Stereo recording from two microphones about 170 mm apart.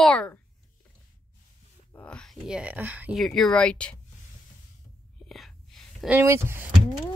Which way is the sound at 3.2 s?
5° left (ahead or behind).